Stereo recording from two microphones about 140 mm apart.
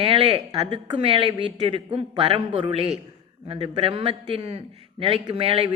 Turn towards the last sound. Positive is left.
turn(degrees=-45)  # may be behind; listen again after turning